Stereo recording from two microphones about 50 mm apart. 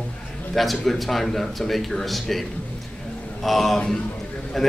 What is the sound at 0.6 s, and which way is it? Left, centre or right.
Speech, centre.